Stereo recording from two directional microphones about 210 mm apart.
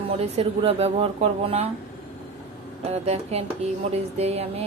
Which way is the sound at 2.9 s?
30° right (ahead or behind).